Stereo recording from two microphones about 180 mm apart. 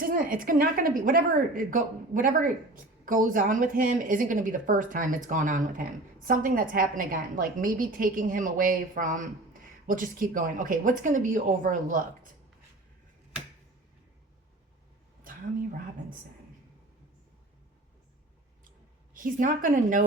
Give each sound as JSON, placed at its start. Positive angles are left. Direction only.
{"t": 0.0, "sound": "speech", "side_deg": -50}
{"t": 19.1, "sound": "speech", "side_deg": -50}